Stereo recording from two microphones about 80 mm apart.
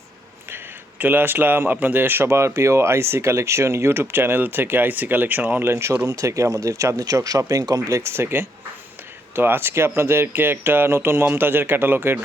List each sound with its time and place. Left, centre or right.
0.5 s speech: right
5.7 s speech: right